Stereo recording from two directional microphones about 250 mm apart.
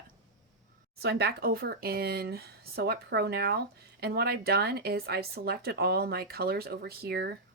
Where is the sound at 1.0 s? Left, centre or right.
Right.